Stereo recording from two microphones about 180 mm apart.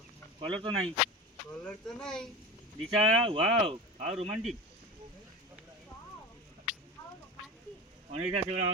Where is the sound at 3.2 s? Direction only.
30° right (ahead or behind).